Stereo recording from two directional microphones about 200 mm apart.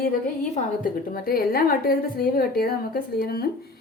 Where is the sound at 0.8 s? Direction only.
45° left (ahead or behind).